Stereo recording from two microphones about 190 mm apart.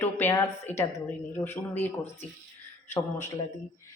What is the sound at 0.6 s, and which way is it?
Speech, 35° left (ahead or behind).